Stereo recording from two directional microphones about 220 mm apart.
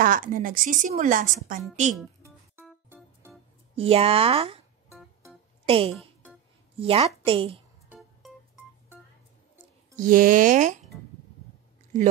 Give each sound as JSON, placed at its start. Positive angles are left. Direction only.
{"t": 0.0, "sound": "a woman's voice", "side_deg": -40}
{"t": 2.6, "sound": "music", "side_deg": -10}
{"t": 3.7, "sound": "speech", "side_deg": -25}
{"t": 4.9, "sound": "music", "side_deg": 0}
{"t": 5.7, "sound": "speech", "side_deg": -25}
{"t": 9.9, "sound": "a woman's voice", "side_deg": -40}